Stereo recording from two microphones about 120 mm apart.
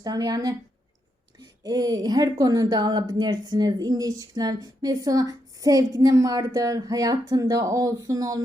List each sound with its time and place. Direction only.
0.0 s speech: 30° right (ahead or behind)
1.6 s speech: 30° right (ahead or behind)